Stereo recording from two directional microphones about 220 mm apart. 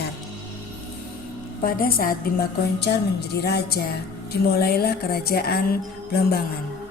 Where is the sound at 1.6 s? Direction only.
40° left (ahead or behind).